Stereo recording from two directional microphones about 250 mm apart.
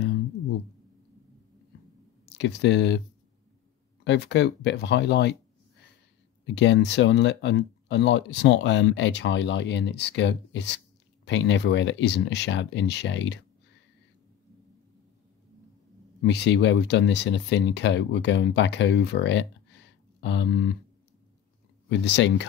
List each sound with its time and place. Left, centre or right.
2.2 s speech: left
4.0 s speech: left
6.4 s speech: left
16.2 s speech: left
20.2 s a sound: left
21.8 s speech: left